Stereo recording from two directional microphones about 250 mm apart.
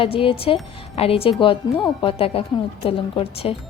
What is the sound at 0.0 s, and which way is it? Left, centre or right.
A woman's voice, left.